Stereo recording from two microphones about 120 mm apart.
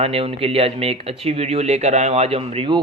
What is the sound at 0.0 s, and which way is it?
Speech, 55° right (ahead or behind).